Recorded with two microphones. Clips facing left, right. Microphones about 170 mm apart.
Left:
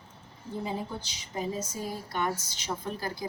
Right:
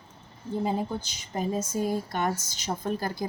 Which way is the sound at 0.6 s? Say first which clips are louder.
Right 6 dB; 50° right (ahead or behind).